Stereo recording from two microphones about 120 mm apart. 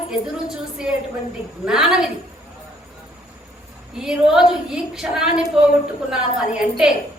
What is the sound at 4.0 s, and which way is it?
A woman's voice, 5° right (ahead or behind).